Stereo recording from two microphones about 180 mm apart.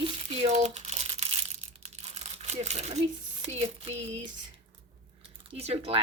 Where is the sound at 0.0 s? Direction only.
35° right (ahead or behind).